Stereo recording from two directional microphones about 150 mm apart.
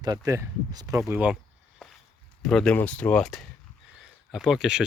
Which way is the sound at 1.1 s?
10° right (ahead or behind).